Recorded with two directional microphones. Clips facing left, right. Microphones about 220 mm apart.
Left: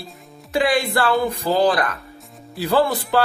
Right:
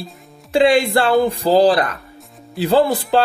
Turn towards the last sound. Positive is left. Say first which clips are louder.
# right 3 dB
turn(degrees=-25)  # may be behind; listen again after turning